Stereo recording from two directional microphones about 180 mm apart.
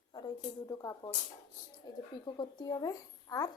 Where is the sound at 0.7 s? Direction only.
20° left (ahead or behind).